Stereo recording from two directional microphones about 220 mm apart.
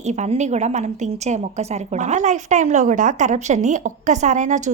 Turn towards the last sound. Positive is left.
turn(degrees=-35)  # may be behind; listen again after turning